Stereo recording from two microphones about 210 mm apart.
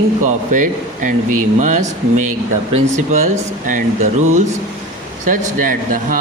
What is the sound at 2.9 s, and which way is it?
Speech, 35° right (ahead or behind).